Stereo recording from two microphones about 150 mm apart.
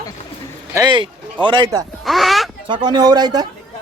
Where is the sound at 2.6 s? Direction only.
30° right (ahead or behind).